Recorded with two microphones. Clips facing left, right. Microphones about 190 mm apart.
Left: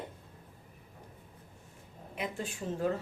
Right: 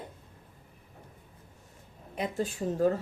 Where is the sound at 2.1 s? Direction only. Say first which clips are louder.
Right 6 dB; 40° right (ahead or behind).